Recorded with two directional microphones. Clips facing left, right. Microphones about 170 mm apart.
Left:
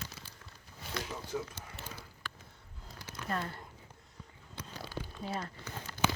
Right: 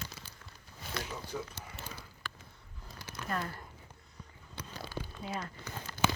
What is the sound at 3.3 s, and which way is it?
Speech, 30° left (ahead or behind).